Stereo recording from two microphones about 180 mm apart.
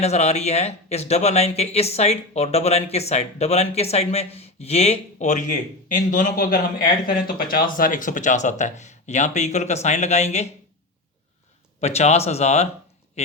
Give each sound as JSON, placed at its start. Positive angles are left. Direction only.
{"t": 0.0, "sound": "speech", "side_deg": 35}
{"t": 11.8, "sound": "speech", "side_deg": 35}
{"t": 13.2, "sound": "a sound", "side_deg": 35}